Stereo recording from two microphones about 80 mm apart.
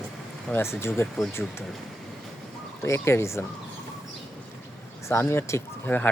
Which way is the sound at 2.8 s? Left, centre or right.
Left.